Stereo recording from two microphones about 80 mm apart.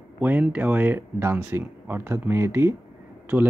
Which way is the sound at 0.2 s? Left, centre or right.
Right.